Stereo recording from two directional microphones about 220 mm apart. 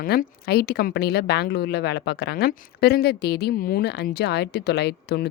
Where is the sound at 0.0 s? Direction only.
40° left (ahead or behind).